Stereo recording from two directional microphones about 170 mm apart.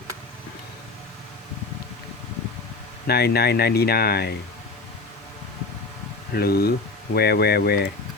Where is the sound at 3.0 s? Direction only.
65° left (ahead or behind).